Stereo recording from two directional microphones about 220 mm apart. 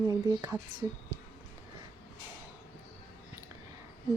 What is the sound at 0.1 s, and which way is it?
Speech, 15° right (ahead or behind).